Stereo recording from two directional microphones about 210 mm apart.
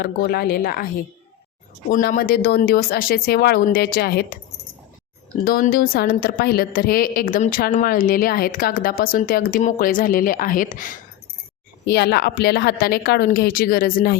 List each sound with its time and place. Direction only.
0.0 s a woman's voice: 45° left (ahead or behind)
1.9 s a woman's voice: 45° left (ahead or behind)
5.5 s a woman's voice: 45° left (ahead or behind)
11.9 s a woman's voice: 50° left (ahead or behind)